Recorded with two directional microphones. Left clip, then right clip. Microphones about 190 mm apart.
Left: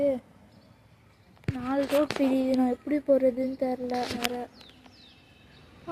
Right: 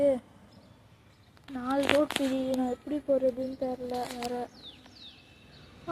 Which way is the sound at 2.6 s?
55° left (ahead or behind).